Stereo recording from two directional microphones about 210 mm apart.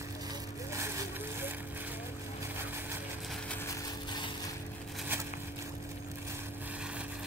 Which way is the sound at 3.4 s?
15° left (ahead or behind).